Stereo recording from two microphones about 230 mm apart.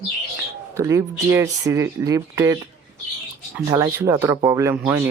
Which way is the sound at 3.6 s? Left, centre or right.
Centre.